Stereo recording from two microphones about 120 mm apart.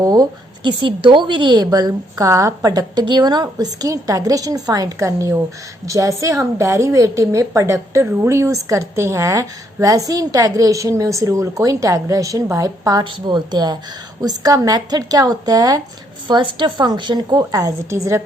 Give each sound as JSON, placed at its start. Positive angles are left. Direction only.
{"t": 0.0, "sound": "a woman's voice", "side_deg": -35}
{"t": 16.2, "sound": "a woman's voice", "side_deg": -40}